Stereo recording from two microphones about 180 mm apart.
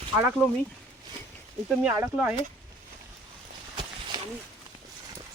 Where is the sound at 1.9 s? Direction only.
10° right (ahead or behind).